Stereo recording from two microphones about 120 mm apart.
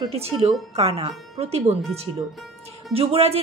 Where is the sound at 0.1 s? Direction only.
55° right (ahead or behind).